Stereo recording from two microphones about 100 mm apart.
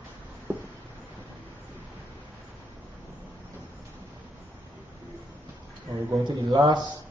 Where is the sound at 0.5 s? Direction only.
20° right (ahead or behind).